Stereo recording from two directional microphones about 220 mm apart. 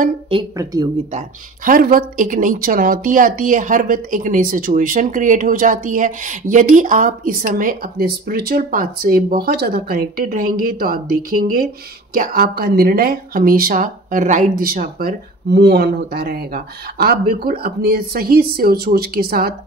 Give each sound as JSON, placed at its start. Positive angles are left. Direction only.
{"t": 0.3, "sound": "speech", "side_deg": -20}
{"t": 1.1, "sound": "a woman's voice", "side_deg": -40}